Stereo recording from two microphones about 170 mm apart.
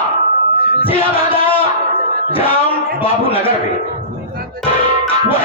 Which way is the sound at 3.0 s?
35° left (ahead or behind).